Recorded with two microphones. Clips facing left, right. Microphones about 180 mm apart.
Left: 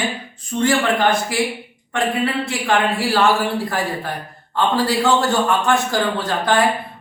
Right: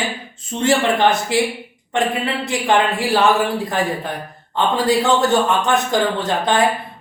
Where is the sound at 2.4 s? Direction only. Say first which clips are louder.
Right 2 dB; 20° right (ahead or behind).